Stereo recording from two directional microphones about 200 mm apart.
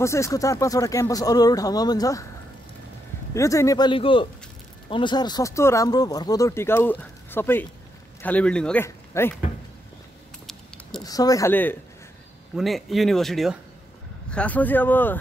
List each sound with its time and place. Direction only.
0.0 s speech: 15° left (ahead or behind)
3.3 s speech: 15° left (ahead or behind)
11.1 s speech: 20° left (ahead or behind)
12.5 s speech: centre (ahead or behind)